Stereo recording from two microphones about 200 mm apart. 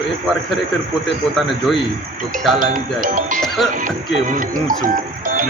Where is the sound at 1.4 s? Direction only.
Centre (ahead or behind).